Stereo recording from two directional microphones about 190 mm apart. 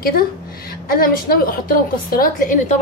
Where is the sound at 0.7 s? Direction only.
50° left (ahead or behind).